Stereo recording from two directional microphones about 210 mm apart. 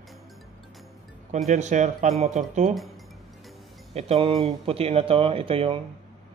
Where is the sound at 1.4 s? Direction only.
35° right (ahead or behind).